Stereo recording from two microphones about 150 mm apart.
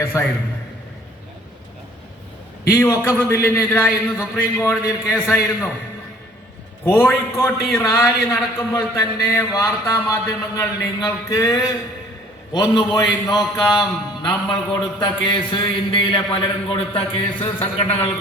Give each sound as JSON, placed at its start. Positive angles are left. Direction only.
{"t": 0.0, "sound": "a man's voice", "side_deg": 15}
{"t": 2.6, "sound": "a man's voice", "side_deg": 20}
{"t": 6.8, "sound": "a man's voice", "side_deg": 15}